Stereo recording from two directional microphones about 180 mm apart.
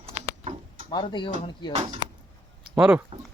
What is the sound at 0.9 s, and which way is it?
Speech, 25° left (ahead or behind).